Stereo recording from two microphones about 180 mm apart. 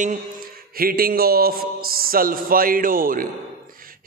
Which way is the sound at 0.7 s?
55° right (ahead or behind).